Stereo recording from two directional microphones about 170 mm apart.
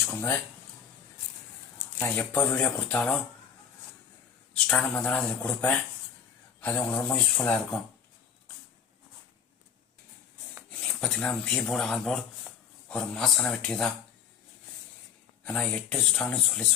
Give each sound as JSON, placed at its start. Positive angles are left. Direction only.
{"t": 0.0, "sound": "speech", "side_deg": 15}
{"t": 2.0, "sound": "speech", "side_deg": 10}
{"t": 4.5, "sound": "speech", "side_deg": 5}
{"t": 11.0, "sound": "speech", "side_deg": 5}
{"t": 15.4, "sound": "speech", "side_deg": 5}